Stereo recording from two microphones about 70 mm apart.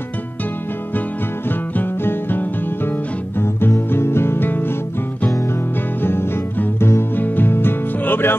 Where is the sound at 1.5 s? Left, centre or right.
Left.